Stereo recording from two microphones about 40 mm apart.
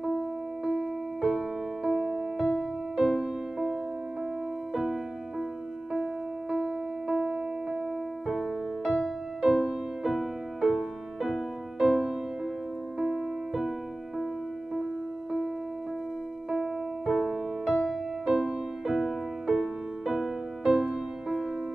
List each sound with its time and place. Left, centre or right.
1.2 s music: centre
3.0 s music: centre
6.5 s music: right
9.4 s music: right
10.0 s music: centre
11.8 s music: right
13.0 s music: centre
16.4 s music: centre
17.0 s music: centre
20.7 s music: right